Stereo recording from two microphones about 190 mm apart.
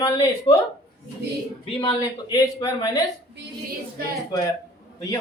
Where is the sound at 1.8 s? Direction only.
20° left (ahead or behind).